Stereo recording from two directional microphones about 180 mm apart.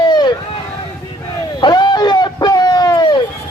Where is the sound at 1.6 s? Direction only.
25° left (ahead or behind).